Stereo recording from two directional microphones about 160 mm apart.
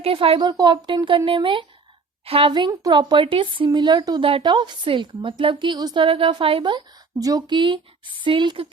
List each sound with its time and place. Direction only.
0.0 s a woman's voice: 35° right (ahead or behind)